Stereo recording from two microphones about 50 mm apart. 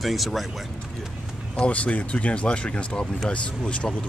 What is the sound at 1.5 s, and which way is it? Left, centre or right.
Speech, left.